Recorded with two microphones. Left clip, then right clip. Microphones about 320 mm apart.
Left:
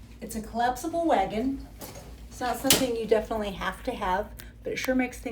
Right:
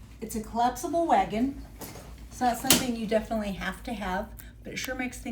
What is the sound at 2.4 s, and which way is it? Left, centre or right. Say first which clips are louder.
A woman's voice: even; centre.